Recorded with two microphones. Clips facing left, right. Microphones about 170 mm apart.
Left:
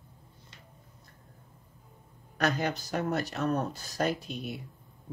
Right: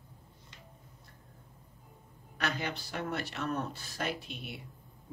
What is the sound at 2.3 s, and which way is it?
Speech, 40° left (ahead or behind).